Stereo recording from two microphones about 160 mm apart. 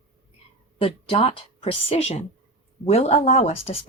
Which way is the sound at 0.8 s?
35° left (ahead or behind).